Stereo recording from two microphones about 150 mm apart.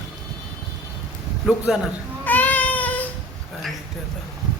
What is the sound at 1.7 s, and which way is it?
Speech, centre (ahead or behind).